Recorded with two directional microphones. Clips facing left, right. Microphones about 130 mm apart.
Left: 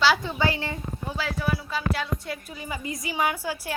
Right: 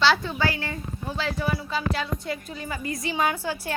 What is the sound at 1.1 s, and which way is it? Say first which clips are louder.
Speech: right 1 dB; 5° left (ahead or behind).